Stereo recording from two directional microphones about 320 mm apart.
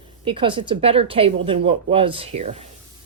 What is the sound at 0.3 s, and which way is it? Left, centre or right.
Speech, centre.